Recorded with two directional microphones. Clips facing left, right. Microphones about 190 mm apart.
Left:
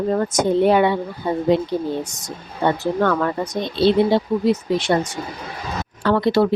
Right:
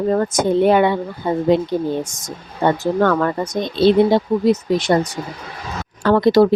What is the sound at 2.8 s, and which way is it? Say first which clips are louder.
Speech: right 3 dB; 45° right (ahead or behind).